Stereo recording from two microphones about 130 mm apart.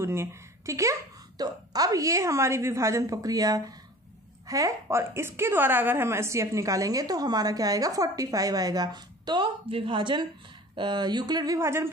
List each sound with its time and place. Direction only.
0.0 s a woman's voice: 20° right (ahead or behind)